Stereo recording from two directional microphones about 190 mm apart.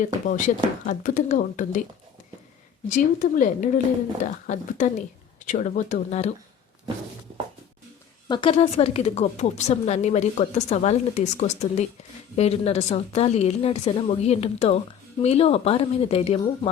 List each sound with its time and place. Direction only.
0.0 s a woman's voice: 40° left (ahead or behind)
2.9 s a woman's voice: 45° left (ahead or behind)
8.3 s a woman's voice: 25° left (ahead or behind)